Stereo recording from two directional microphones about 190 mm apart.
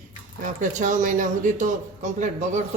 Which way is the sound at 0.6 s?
40° right (ahead or behind).